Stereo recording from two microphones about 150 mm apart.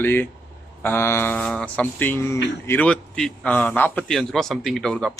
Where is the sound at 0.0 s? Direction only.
15° left (ahead or behind).